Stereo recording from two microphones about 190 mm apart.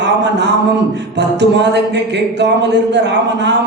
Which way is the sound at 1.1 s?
65° right (ahead or behind).